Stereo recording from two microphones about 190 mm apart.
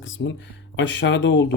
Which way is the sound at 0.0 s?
80° left.